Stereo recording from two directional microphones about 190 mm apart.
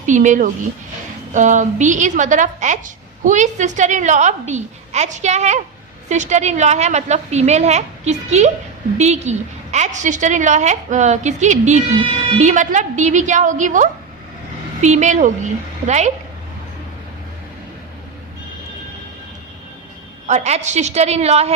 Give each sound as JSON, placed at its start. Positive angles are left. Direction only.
{"t": 0.0, "sound": "a woman's voice", "side_deg": -40}
{"t": 20.2, "sound": "a woman's voice", "side_deg": -35}